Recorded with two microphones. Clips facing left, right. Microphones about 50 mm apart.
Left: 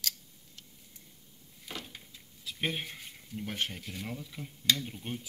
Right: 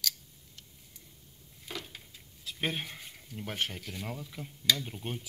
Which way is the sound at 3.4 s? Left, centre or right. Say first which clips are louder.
Even; centre.